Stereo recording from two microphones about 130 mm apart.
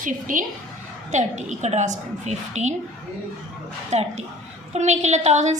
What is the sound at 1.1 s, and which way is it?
A woman's voice, 65° right (ahead or behind).